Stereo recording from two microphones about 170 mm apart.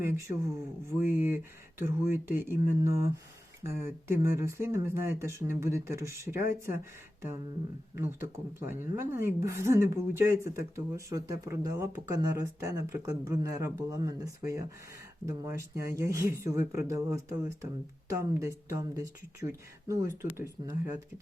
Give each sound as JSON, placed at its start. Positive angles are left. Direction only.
{"t": 0.0, "sound": "speech", "side_deg": -15}
{"t": 8.5, "sound": "speech", "side_deg": -15}